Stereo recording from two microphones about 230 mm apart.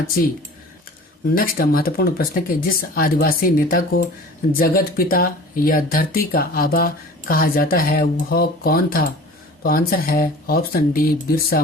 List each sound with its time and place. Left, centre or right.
1.4 s speech: left